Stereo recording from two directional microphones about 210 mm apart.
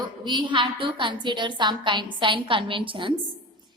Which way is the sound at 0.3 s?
20° right (ahead or behind).